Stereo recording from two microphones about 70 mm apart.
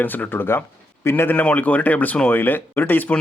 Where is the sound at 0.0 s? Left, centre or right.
Left.